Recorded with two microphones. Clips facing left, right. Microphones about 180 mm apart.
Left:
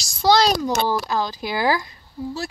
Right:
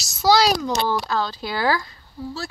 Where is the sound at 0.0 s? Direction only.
5° right (ahead or behind).